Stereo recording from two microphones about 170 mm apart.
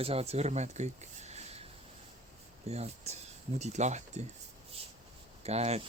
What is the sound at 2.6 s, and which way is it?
Speech, 40° right (ahead or behind).